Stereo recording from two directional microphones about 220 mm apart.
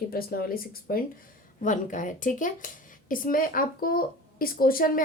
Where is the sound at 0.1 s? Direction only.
45° left (ahead or behind).